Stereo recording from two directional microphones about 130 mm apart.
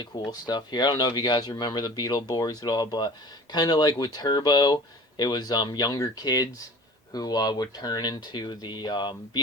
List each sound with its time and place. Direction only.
0.0 s speech: 30° left (ahead or behind)